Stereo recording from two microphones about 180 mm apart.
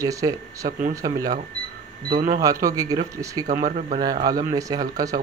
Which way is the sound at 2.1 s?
40° right (ahead or behind).